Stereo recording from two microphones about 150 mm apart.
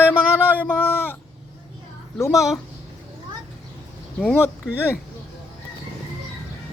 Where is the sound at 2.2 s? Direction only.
20° left (ahead or behind).